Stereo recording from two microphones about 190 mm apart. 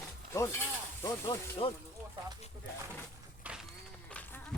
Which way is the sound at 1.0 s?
25° left (ahead or behind).